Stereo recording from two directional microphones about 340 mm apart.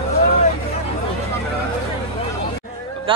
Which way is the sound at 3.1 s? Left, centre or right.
Centre.